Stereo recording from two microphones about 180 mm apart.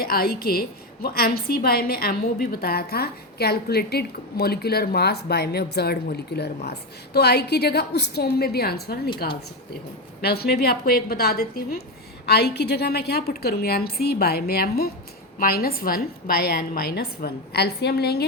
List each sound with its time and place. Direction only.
0.0 s a woman's voice: 55° left (ahead or behind)